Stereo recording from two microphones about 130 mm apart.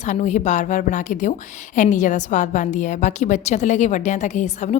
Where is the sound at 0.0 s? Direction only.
65° left (ahead or behind).